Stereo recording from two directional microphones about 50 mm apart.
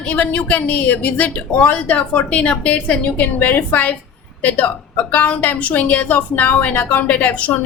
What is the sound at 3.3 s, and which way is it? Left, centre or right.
A woman's voice, left.